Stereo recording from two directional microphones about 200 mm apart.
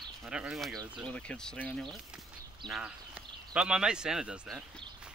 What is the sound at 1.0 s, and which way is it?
Speech, 5° left (ahead or behind).